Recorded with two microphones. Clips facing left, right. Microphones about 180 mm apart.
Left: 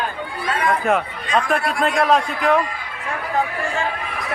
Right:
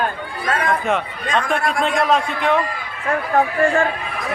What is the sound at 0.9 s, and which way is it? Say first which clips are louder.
A man's voice: left 1 dB; centre (ahead or behind).